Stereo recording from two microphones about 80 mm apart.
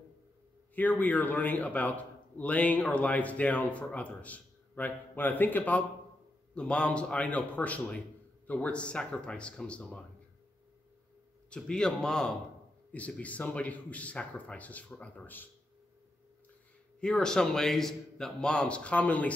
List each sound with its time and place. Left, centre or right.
0.7 s a man's voice: left
11.5 s speech: centre
12.9 s speech: centre
17.0 s speech: centre